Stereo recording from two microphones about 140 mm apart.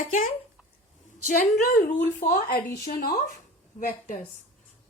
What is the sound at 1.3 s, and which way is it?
A woman's voice, 85° left.